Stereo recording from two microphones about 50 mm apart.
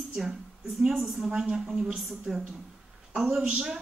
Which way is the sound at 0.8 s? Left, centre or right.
Centre.